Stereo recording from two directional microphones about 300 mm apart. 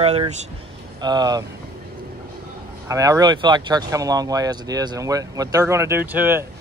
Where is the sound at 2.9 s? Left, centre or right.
Centre.